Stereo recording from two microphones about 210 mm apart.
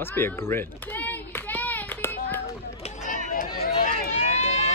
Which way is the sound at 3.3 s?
40° left (ahead or behind).